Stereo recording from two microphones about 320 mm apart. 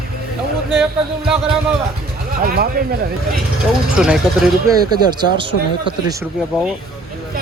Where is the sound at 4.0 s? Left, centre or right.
Centre.